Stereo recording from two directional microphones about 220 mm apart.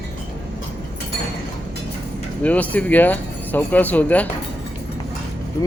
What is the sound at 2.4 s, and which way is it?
A man's voice, 5° left (ahead or behind).